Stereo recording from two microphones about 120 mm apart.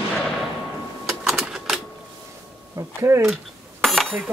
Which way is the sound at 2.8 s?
25° right (ahead or behind).